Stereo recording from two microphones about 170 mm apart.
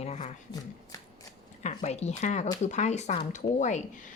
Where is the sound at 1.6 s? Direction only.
40° left (ahead or behind).